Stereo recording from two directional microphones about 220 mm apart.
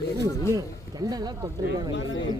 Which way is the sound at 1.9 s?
60° left (ahead or behind).